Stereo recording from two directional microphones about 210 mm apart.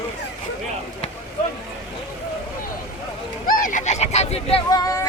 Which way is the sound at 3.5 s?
40° left (ahead or behind).